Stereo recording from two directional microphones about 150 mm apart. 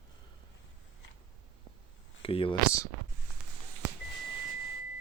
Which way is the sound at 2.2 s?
35° left (ahead or behind).